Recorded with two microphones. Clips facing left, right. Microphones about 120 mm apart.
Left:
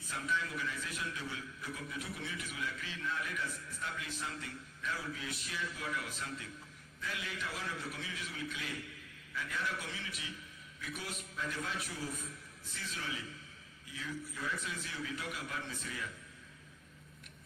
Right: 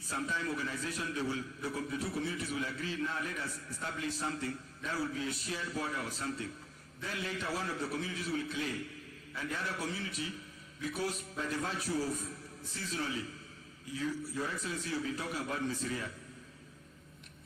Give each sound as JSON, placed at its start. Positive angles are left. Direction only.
{"t": 0.1, "sound": "a man's voice", "side_deg": -35}